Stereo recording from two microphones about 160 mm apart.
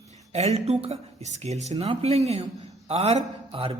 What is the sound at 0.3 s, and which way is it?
Speech, 40° right (ahead or behind).